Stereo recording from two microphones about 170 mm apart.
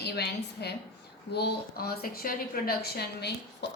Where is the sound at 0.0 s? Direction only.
75° left (ahead or behind).